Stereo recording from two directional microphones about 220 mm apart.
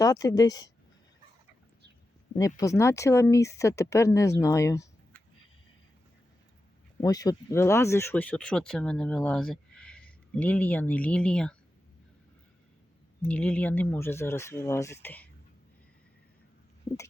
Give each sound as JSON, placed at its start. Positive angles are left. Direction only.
{"t": 0.0, "sound": "speech", "side_deg": 15}
{"t": 2.3, "sound": "speech", "side_deg": 15}
{"t": 7.0, "sound": "speech", "side_deg": 15}
{"t": 13.2, "sound": "speech", "side_deg": 5}